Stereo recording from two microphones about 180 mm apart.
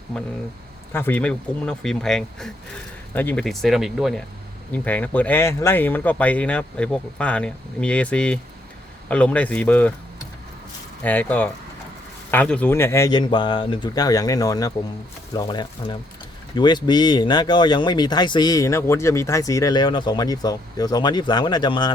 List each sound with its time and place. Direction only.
0.9 s speech: 10° left (ahead or behind)
11.0 s speech: 10° left (ahead or behind)